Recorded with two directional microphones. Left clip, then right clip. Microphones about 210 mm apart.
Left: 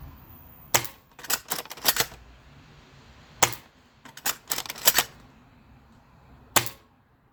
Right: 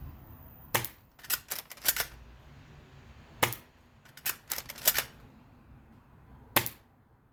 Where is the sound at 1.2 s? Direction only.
15° left (ahead or behind).